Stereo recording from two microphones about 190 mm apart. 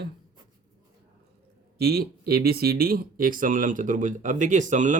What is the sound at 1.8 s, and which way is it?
Speech, 55° right (ahead or behind).